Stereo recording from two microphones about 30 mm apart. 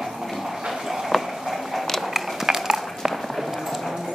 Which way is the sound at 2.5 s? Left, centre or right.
Centre.